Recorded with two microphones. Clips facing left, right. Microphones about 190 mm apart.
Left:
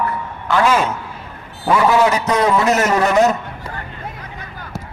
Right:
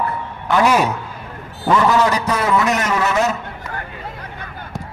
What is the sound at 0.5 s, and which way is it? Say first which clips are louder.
Speech: even; 15° right (ahead or behind).